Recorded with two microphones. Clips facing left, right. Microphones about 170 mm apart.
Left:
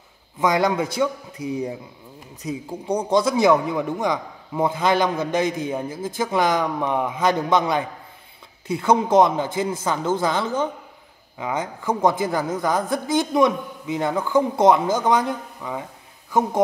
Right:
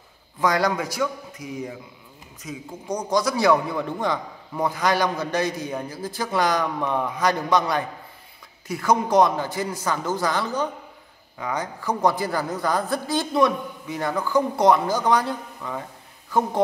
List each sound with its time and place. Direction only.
0.4 s a man's voice: 20° left (ahead or behind)